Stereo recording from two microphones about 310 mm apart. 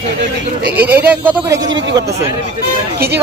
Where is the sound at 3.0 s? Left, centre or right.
Right.